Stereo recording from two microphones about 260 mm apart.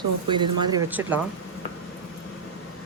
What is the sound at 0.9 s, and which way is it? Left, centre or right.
Speech, centre.